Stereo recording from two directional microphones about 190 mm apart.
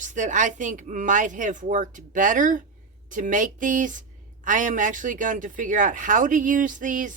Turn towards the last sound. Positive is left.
turn(degrees=-45)  # may be behind; listen again after turning